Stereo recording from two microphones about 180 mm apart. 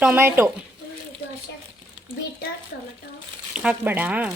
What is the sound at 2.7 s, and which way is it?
Speech, 65° left (ahead or behind).